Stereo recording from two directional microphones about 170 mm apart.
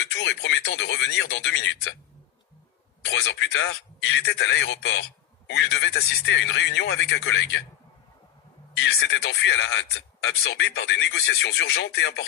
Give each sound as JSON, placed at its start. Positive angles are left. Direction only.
{"t": 0.1, "sound": "speech", "side_deg": 90}
{"t": 3.1, "sound": "speech", "side_deg": 90}
{"t": 8.8, "sound": "speech", "side_deg": 90}